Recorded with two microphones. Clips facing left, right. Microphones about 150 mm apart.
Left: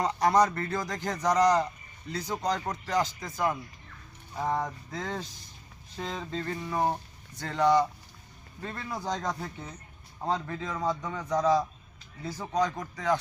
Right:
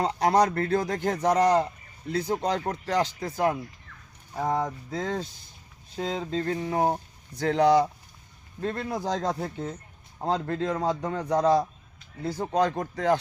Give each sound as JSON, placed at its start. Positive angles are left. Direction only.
{"t": 0.0, "sound": "a man's voice", "side_deg": -60}
{"t": 4.9, "sound": "speech", "side_deg": -45}
{"t": 6.1, "sound": "a man's voice", "side_deg": -55}